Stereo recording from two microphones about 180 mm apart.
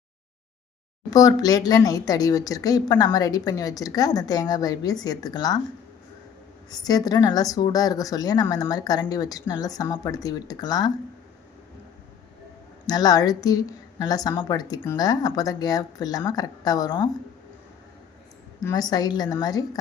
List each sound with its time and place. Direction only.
1.1 s a woman's voice: 20° left (ahead or behind)
6.7 s a woman's voice: 20° left (ahead or behind)
12.9 s a woman's voice: 20° left (ahead or behind)
18.6 s a woman's voice: 20° left (ahead or behind)